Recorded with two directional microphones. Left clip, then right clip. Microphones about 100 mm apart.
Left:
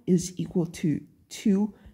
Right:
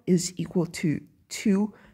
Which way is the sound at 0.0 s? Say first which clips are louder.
Right 1 dB; 30° right (ahead or behind).